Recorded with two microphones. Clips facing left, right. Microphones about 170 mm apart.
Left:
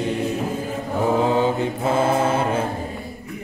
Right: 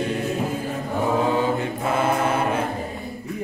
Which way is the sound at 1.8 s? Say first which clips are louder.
Left 3 dB; 30° left (ahead or behind).